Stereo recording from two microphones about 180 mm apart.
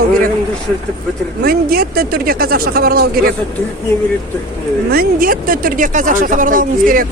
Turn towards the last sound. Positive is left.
turn(degrees=-50)  # may be behind; listen again after turning